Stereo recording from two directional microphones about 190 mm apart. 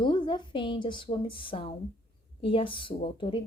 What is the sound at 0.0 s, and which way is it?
A woman's voice, 25° left (ahead or behind).